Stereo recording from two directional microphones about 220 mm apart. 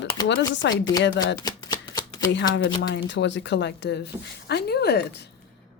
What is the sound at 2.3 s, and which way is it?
A woman's voice, 55° left (ahead or behind).